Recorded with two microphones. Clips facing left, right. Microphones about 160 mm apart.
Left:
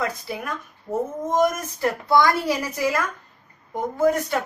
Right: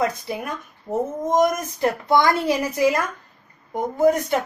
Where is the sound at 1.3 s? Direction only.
20° right (ahead or behind).